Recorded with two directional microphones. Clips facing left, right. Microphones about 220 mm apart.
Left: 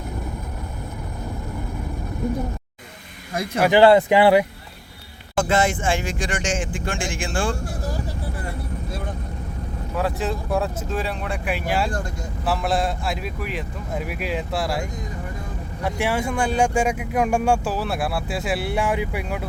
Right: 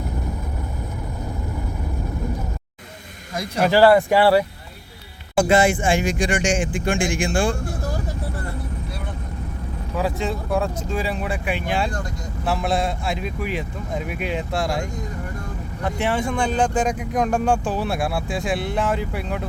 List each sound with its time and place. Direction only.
3.6 s speech: 20° left (ahead or behind)
5.4 s speech: 10° right (ahead or behind)
10.0 s speech: centre (ahead or behind)